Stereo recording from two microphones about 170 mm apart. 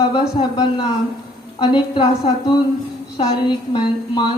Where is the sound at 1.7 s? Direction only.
30° left (ahead or behind).